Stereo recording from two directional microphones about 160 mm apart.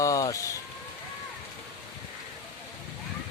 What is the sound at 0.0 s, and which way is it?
Rain on surface, 20° left (ahead or behind).